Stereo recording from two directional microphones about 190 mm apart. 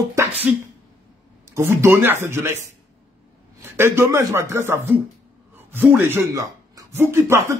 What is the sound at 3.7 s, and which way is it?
A man's voice, 15° right (ahead or behind).